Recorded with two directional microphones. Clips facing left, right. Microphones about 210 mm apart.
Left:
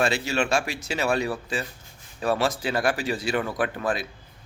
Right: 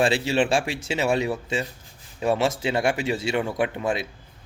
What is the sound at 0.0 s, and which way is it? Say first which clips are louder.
Speech: right 3 dB; 30° right (ahead or behind).